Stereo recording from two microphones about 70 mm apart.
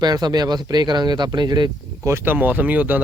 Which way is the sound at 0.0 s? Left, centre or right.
Right.